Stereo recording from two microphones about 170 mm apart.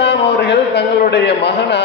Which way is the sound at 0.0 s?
80° left.